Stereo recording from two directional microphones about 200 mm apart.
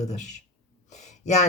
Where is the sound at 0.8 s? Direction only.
35° left (ahead or behind).